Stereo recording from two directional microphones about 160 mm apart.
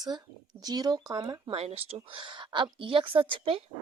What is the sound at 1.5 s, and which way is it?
A woman's voice, 40° right (ahead or behind).